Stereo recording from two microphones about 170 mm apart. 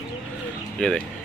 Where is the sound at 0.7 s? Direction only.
5° left (ahead or behind).